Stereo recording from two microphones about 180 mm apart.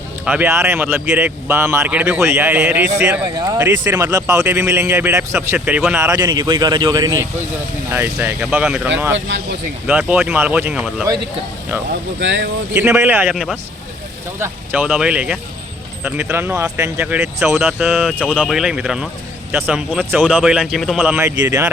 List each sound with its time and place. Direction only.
0.3 s speech: 10° right (ahead or behind)
3.2 s speech: 25° right (ahead or behind); by 6.0 s 5° right (ahead or behind)
6.0 s speech: 20° right (ahead or behind)
9.1 s speech: 90° right
9.8 s speech: 5° right (ahead or behind)
12.2 s speech: 90° right
12.7 s speech: 15° right (ahead or behind)
13.3 s speech: centre (ahead or behind)
21.0 s speech: 15° right (ahead or behind)